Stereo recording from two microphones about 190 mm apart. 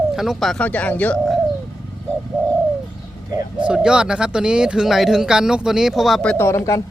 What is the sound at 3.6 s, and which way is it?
Speech, 5° right (ahead or behind).